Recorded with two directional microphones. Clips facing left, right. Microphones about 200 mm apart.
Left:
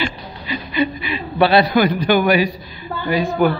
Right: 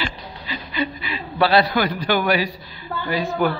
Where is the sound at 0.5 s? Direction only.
20° left (ahead or behind).